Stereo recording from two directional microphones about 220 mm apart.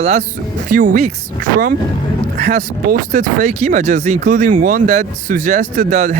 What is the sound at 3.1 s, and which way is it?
Speech, 30° right (ahead or behind).